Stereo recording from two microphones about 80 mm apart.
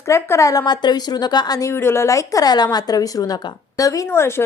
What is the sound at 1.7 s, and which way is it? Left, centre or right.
A woman's voice, left.